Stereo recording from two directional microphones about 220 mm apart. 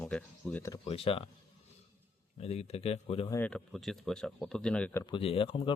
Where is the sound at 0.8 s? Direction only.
25° left (ahead or behind).